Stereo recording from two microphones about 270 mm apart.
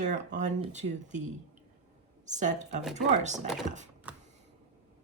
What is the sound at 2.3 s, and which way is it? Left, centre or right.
Speech, right.